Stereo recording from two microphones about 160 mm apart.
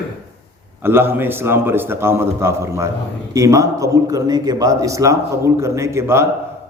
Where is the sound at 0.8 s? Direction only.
15° right (ahead or behind).